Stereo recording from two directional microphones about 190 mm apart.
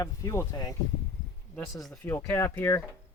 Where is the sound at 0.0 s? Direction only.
20° left (ahead or behind).